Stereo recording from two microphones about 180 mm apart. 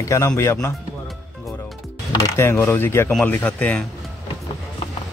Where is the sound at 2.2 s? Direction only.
15° left (ahead or behind).